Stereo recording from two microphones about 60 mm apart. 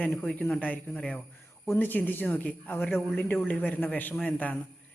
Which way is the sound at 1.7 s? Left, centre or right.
Left.